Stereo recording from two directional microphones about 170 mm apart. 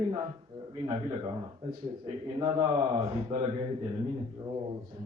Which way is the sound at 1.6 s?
40° right (ahead or behind).